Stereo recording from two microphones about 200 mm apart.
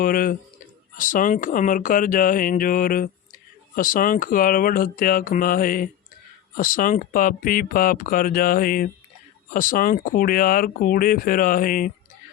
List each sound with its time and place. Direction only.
0.0 s speech: 45° left (ahead or behind)